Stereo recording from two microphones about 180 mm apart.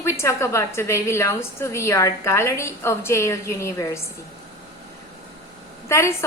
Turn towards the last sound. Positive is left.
turn(degrees=15)  # may be behind; listen again after turning